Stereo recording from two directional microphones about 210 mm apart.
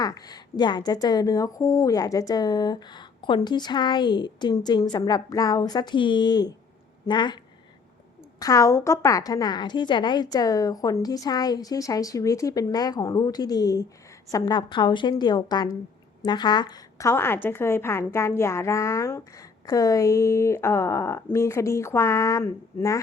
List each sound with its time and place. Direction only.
0.0 s speech: 20° left (ahead or behind)
8.4 s a woman's voice: 15° left (ahead or behind)